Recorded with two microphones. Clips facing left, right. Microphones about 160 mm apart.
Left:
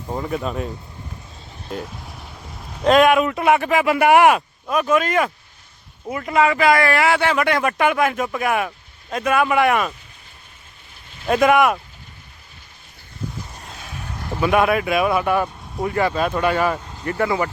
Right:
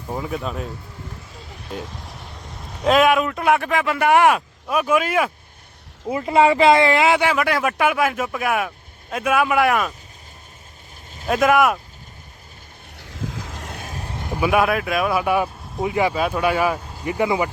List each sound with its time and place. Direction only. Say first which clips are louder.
0.1 s speech: left 2 dB; centre (ahead or behind)
1.7 s speech: left 2 dB; centre (ahead or behind)
4.7 s speech: left 1 dB; 10° right (ahead or behind)
6.1 s speech: right 2 dB; 25° right (ahead or behind)
7.3 s speech: left 1 dB; 5° right (ahead or behind)
11.3 s speech: left 1 dB; centre (ahead or behind)
13.0 s vehicle: right 1 dB; 90° right
13.8 s vehicle: right 2 dB; 35° right (ahead or behind)
14.2 s speech: left 1 dB; 15° right (ahead or behind)